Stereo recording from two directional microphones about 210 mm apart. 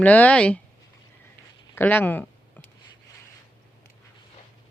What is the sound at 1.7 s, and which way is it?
Speech, 10° left (ahead or behind).